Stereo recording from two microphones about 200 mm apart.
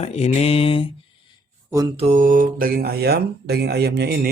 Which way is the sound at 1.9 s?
35° right (ahead or behind).